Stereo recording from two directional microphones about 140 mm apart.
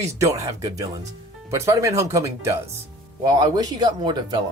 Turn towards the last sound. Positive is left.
turn(degrees=-35)  # may be behind; listen again after turning